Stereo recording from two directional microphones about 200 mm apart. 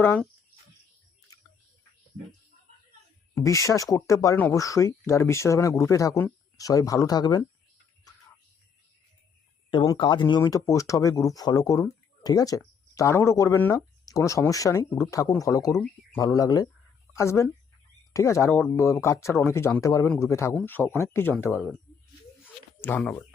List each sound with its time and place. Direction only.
0.0 s speech: 10° left (ahead or behind)
3.3 s speech: 15° left (ahead or behind)
9.6 s speech: 20° left (ahead or behind)
15.7 s speech: centre (ahead or behind)
16.2 s speech: 15° left (ahead or behind)
21.5 s speech: centre (ahead or behind)
22.4 s a sound: 10° left (ahead or behind)